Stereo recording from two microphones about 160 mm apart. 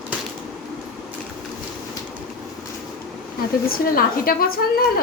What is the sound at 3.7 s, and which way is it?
A woman's voice, 65° left (ahead or behind).